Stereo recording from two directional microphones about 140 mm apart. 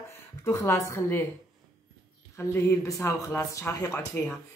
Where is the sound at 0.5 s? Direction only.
20° left (ahead or behind).